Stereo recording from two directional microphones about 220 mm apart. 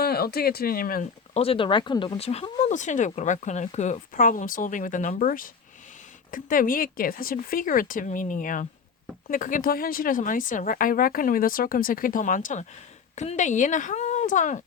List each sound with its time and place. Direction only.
0.0 s speech: 45° left (ahead or behind)
1.4 s a woman's voice: 25° left (ahead or behind)